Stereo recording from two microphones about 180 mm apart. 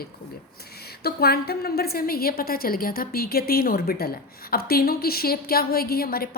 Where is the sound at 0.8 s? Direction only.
60° left (ahead or behind).